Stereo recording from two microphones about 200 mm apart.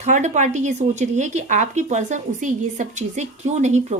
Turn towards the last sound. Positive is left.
turn(degrees=-35)  # may be behind; listen again after turning